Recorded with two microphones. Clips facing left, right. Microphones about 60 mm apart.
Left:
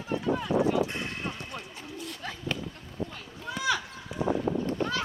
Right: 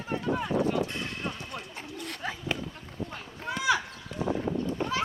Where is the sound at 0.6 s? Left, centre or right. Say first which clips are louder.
Left 2 dB; centre.